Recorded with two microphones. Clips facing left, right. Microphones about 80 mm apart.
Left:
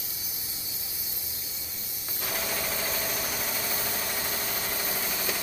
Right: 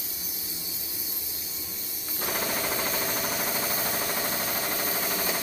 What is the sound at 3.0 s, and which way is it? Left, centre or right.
Engine, right.